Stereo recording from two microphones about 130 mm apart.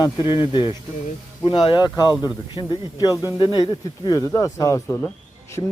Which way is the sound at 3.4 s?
45° left (ahead or behind).